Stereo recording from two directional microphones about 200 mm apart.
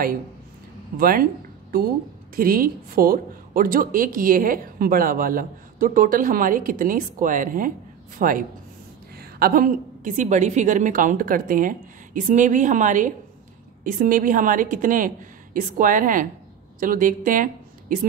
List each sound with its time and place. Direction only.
0.9 s speech: 45° right (ahead or behind)
2.3 s a woman's voice: 45° right (ahead or behind)